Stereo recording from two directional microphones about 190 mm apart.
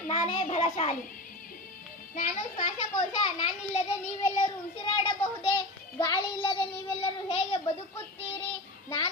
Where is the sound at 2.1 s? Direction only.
40° left (ahead or behind).